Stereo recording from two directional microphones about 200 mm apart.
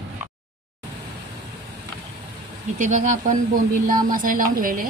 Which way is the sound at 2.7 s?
40° right (ahead or behind).